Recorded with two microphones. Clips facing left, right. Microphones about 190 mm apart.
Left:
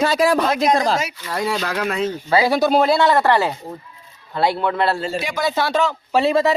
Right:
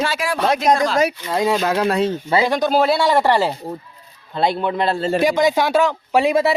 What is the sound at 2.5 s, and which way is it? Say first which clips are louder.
Speech: left 1 dB; 5° left (ahead or behind).